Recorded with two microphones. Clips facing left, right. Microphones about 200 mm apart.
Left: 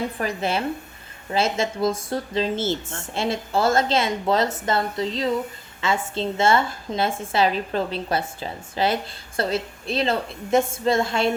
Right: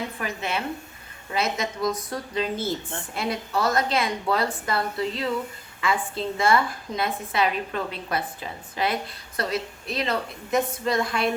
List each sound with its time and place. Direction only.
0.2 s a woman's voice: 35° left (ahead or behind)